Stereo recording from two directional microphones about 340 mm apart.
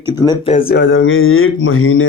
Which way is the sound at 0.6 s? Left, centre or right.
Left.